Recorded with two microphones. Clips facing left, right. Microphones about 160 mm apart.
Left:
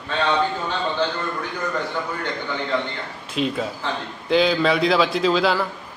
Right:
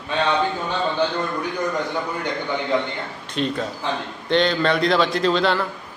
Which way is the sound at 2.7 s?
15° right (ahead or behind).